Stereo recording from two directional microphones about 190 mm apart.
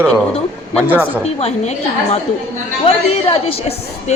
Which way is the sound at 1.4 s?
35° left (ahead or behind).